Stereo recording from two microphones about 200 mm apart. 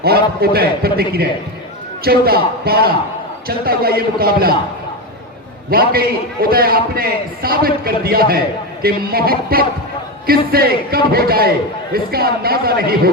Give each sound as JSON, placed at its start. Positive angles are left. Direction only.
{"t": 0.0, "sound": "a man's voice", "side_deg": -50}
{"t": 5.7, "sound": "a man's voice", "side_deg": -50}